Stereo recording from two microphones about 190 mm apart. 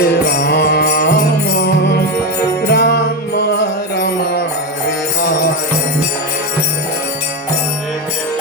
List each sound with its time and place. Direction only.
0.0 s music: 55° left (ahead or behind)